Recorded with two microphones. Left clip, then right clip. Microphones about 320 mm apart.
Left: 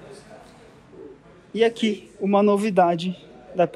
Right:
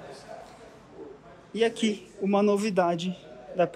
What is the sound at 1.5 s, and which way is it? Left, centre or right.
Speech, centre.